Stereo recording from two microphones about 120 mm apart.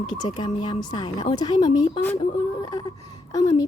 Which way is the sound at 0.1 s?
35° left (ahead or behind).